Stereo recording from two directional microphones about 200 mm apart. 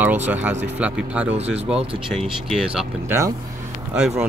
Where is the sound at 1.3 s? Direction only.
30° right (ahead or behind).